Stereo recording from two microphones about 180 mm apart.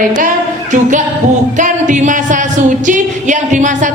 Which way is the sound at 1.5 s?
45° right (ahead or behind).